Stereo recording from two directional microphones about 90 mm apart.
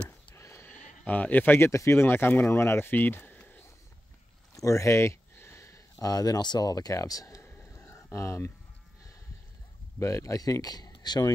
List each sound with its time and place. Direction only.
0.4 s speech: 30° left (ahead or behind)
4.6 s speech: 35° left (ahead or behind)
7.4 s a sound: 25° left (ahead or behind)
9.9 s speech: 35° left (ahead or behind)